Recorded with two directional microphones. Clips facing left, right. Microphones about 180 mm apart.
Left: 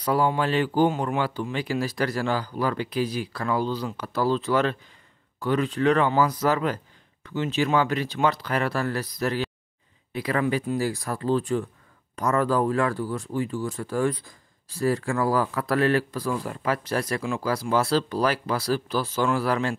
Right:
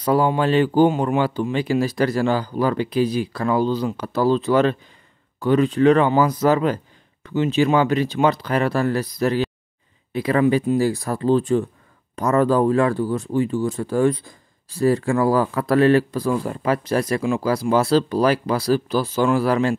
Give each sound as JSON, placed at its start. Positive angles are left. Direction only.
{"t": 0.0, "sound": "speech", "side_deg": -25}